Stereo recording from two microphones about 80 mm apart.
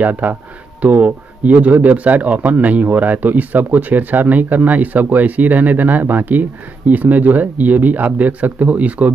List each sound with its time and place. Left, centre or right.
0.0 s speech: right